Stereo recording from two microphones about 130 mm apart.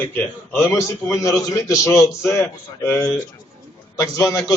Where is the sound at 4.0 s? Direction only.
25° left (ahead or behind).